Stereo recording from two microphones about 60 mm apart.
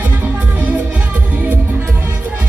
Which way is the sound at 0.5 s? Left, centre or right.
Right.